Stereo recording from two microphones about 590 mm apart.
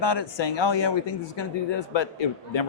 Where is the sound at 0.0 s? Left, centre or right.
Left.